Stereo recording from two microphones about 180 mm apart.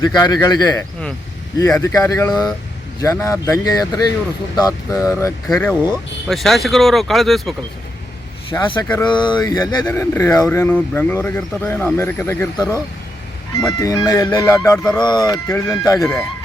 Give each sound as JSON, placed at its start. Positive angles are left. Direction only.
{"t": 0.0, "sound": "speech", "side_deg": 20}
{"t": 8.4, "sound": "speech", "side_deg": 25}